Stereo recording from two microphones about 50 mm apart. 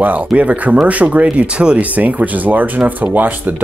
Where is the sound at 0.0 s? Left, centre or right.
Right.